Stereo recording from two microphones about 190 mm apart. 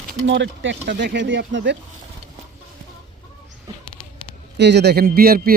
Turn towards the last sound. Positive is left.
turn(degrees=-50)  # may be behind; listen again after turning